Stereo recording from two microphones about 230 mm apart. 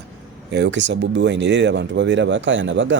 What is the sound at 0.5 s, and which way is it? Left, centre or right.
Speech, right.